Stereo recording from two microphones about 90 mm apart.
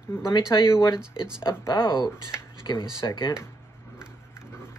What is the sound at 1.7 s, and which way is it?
Speech, 60° left (ahead or behind).